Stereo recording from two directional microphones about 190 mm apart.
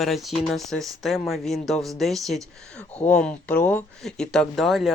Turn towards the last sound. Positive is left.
turn(degrees=0)  # may be behind; listen again after turning